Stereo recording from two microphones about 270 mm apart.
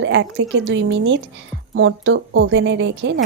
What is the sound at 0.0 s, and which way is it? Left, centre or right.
A woman's voice, right.